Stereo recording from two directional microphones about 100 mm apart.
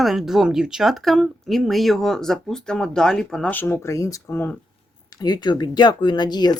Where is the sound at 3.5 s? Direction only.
20° left (ahead or behind).